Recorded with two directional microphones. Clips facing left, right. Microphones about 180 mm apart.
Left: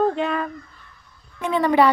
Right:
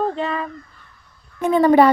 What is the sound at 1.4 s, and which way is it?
Speech, 45° right (ahead or behind).